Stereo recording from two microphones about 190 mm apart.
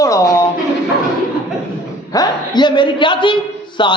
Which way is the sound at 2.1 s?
20° left (ahead or behind).